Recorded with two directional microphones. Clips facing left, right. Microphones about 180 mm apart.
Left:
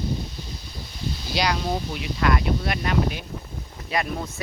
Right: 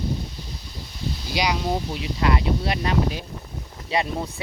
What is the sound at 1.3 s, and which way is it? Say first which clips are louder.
Speech: even; 15° right (ahead or behind).